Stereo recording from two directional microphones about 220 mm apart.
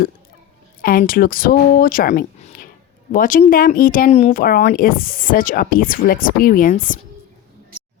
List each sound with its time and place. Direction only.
0.8 s speech: 40° left (ahead or behind)